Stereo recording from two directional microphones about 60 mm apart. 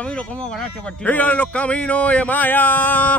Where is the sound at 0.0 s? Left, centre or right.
Centre.